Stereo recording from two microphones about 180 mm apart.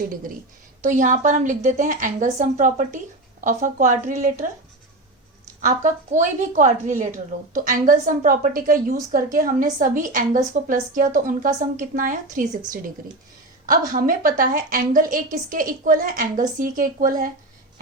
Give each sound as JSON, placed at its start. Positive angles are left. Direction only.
{"t": 0.9, "sound": "a woman's voice", "side_deg": -45}
{"t": 5.6, "sound": "a woman's voice", "side_deg": -45}